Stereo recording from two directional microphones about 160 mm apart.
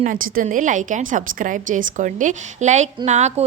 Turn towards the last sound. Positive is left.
turn(degrees=-45)  # may be behind; listen again after turning